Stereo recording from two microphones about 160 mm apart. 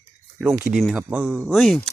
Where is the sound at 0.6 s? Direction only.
5° right (ahead or behind).